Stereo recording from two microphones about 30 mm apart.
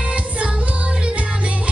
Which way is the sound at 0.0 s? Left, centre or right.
Right.